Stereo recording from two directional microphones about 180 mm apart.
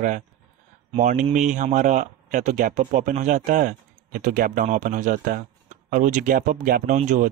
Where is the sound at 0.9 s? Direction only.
40° right (ahead or behind).